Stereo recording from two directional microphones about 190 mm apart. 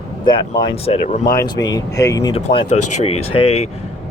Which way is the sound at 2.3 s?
35° left (ahead or behind).